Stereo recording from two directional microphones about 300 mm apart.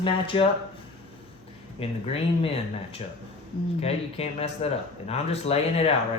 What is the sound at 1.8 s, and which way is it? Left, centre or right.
Speech, centre.